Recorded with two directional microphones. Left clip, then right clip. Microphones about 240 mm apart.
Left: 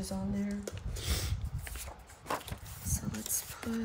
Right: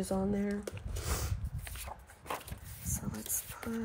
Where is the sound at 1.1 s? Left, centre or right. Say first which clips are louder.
Left 1 dB; centre.